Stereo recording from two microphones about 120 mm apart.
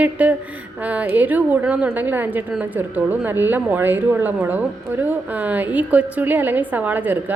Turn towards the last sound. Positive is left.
turn(degrees=-15)  # may be behind; listen again after turning